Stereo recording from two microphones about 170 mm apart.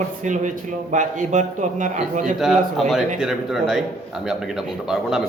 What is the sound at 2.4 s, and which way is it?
A man's voice, centre (ahead or behind).